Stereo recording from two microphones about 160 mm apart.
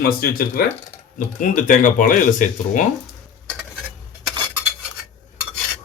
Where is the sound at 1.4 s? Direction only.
55° left (ahead or behind).